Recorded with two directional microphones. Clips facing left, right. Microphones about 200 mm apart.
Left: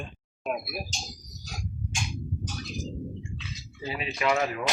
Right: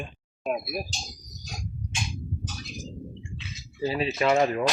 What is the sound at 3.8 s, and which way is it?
Speech, 35° right (ahead or behind).